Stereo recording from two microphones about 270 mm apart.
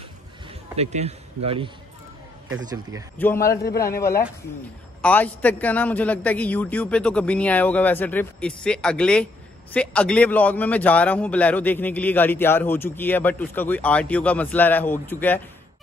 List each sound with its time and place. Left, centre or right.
0.7 s speech: right
3.2 s a man's voice: centre